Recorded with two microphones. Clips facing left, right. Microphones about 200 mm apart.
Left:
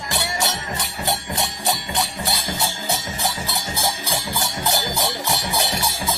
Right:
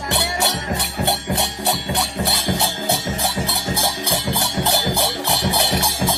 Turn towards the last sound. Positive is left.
turn(degrees=-60)  # may be behind; listen again after turning